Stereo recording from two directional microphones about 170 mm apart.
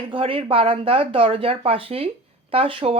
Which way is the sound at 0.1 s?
30° right (ahead or behind).